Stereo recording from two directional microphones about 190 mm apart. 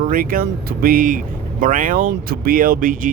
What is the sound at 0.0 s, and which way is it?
Speech, 45° right (ahead or behind).